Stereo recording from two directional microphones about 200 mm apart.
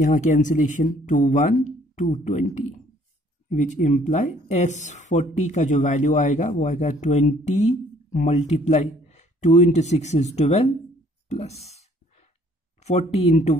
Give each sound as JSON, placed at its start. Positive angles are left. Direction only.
{"t": 0.0, "sound": "speech", "side_deg": 40}
{"t": 12.8, "sound": "speech", "side_deg": 30}